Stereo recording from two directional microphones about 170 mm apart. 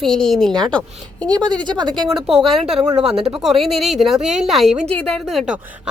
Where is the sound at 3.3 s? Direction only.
Centre (ahead or behind).